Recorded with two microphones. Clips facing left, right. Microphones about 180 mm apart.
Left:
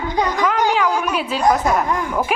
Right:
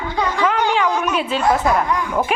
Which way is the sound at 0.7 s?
10° left (ahead or behind).